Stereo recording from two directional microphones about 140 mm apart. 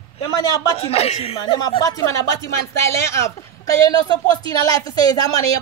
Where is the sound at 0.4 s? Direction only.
25° left (ahead or behind).